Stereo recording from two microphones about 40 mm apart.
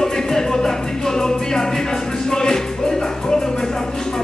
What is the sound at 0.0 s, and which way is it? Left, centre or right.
Music, centre.